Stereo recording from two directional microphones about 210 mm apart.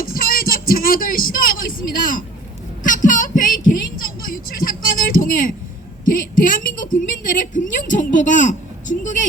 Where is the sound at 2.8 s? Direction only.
40° left (ahead or behind).